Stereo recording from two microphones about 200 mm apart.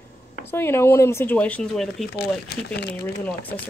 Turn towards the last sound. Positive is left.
turn(degrees=5)  # may be behind; listen again after turning